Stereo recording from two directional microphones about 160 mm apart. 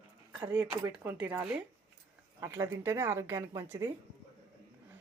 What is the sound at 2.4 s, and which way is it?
Speech, 15° right (ahead or behind).